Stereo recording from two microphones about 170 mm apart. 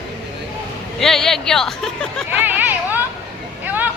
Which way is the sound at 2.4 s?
10° right (ahead or behind).